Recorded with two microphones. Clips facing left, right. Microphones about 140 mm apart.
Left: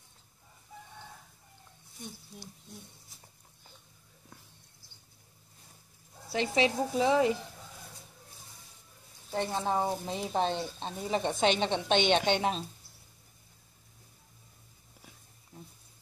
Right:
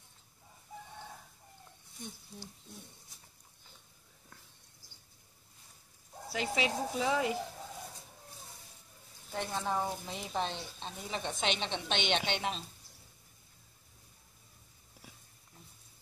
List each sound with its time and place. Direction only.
6.3 s speech: 25° left (ahead or behind)
9.3 s speech: 30° left (ahead or behind)